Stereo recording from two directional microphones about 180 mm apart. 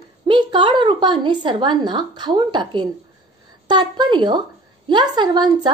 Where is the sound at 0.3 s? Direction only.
25° right (ahead or behind).